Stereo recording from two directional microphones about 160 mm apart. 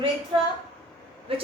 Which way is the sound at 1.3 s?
35° right (ahead or behind).